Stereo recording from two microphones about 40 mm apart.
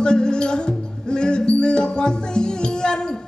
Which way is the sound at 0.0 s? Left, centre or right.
Left.